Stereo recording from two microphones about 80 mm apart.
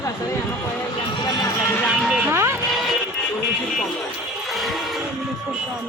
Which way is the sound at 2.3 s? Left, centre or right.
Right.